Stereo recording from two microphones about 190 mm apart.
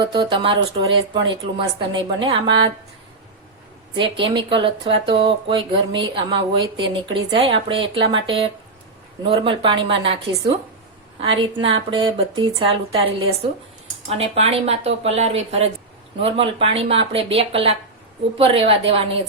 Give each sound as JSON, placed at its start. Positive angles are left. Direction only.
{"t": 0.0, "sound": "speech", "side_deg": -25}
{"t": 3.9, "sound": "speech", "side_deg": -25}